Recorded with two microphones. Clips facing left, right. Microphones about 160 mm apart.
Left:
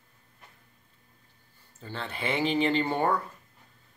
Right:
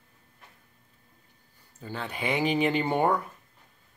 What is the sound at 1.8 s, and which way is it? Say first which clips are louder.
Speech: right 2 dB; 10° right (ahead or behind).